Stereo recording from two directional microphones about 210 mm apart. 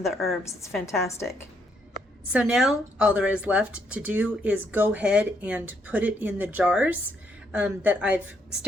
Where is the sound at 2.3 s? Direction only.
5° right (ahead or behind).